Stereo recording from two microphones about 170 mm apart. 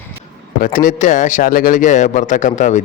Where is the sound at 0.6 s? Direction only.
50° left (ahead or behind).